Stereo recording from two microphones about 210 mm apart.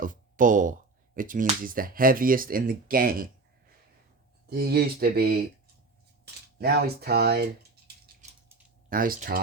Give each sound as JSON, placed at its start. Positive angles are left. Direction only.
{"t": 0.0, "sound": "speech", "side_deg": -40}
{"t": 4.4, "sound": "speech", "side_deg": -45}
{"t": 6.6, "sound": "speech", "side_deg": -50}
{"t": 8.0, "sound": "mechanisms", "side_deg": -35}
{"t": 8.9, "sound": "speech", "side_deg": -40}